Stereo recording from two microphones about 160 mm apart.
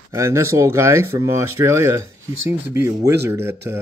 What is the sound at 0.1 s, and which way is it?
Speech, 15° right (ahead or behind).